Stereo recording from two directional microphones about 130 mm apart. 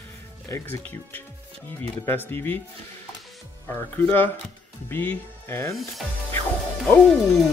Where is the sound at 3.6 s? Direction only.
15° left (ahead or behind).